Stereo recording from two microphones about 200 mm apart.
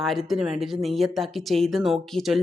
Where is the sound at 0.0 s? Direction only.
Centre (ahead or behind).